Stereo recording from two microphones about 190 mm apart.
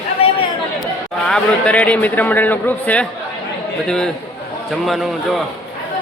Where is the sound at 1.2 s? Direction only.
5° left (ahead or behind).